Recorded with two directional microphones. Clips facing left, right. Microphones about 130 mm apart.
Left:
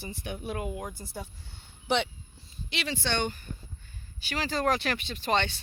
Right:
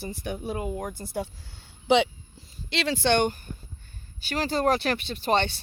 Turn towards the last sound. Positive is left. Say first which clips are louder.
# right 4 dB
turn(degrees=-35)  # may be behind; listen again after turning